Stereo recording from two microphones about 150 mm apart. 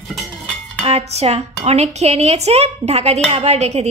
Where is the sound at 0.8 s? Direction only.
45° right (ahead or behind).